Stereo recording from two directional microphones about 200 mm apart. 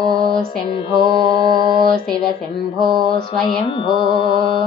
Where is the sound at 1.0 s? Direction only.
20° right (ahead or behind).